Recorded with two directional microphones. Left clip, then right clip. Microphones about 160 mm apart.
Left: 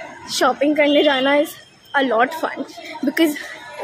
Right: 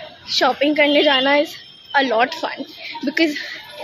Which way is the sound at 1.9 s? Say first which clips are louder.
Even; 10° left (ahead or behind).